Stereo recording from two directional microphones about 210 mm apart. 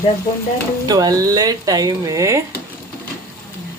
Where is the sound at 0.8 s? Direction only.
20° right (ahead or behind).